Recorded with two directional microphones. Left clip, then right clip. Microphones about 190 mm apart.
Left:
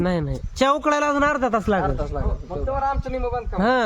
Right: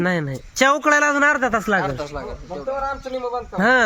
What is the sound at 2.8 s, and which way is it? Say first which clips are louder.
Speech: left 1 dB; centre (ahead or behind).